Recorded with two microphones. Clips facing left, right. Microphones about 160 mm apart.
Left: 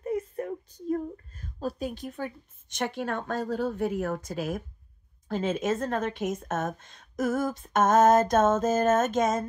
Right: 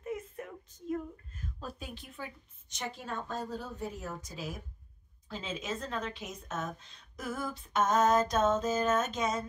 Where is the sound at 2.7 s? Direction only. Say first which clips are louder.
Left 9 dB; 70° left (ahead or behind).